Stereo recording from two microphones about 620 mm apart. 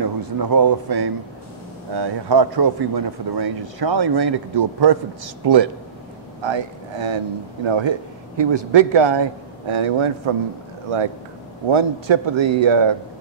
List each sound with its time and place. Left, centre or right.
0.0 s speech: right
11.7 s speech: right